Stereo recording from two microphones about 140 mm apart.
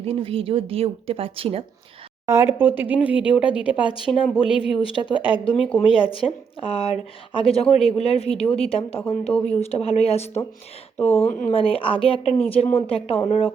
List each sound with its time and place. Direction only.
0.0 s a woman's voice: 40° right (ahead or behind)
2.2 s speech: 20° right (ahead or behind)
3.9 s speech: 40° left (ahead or behind)
10.9 s speech: 15° left (ahead or behind)
11.3 s speech: 70° left (ahead or behind)
11.5 s speech: 40° left (ahead or behind)